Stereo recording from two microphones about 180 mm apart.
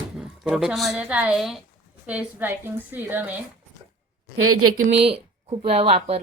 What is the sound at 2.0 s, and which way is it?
A woman's voice, 5° right (ahead or behind).